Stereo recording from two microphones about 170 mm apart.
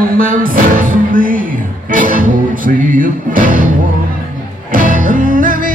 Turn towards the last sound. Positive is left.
turn(degrees=-50)  # may be behind; listen again after turning